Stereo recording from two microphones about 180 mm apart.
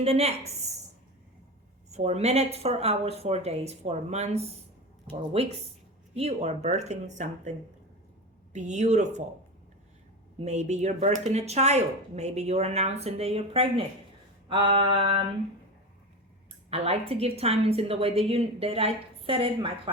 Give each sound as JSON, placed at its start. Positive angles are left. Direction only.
{"t": 0.0, "sound": "a woman's voice", "side_deg": -35}
{"t": 1.9, "sound": "a woman's voice", "side_deg": -40}
{"t": 8.5, "sound": "a woman's voice", "side_deg": -40}
{"t": 10.3, "sound": "a woman's voice", "side_deg": -40}
{"t": 14.4, "sound": "a sound", "side_deg": -30}
{"t": 16.6, "sound": "a woman's voice", "side_deg": -35}